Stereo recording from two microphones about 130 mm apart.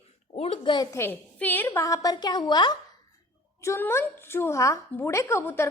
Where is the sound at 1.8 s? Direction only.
25° left (ahead or behind).